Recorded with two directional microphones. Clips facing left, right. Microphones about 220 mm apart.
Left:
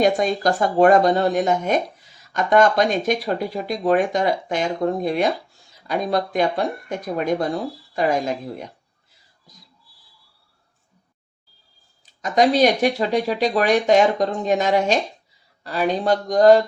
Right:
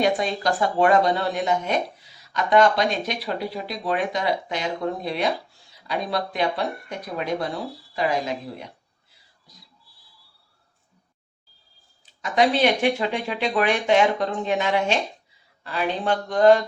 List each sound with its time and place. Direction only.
0.0 s speech: 45° left (ahead or behind)
12.2 s speech: 40° left (ahead or behind)